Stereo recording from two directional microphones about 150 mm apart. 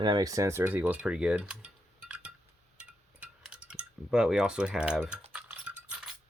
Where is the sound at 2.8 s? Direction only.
5° right (ahead or behind).